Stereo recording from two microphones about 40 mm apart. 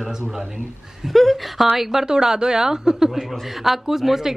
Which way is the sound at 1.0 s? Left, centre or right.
Centre.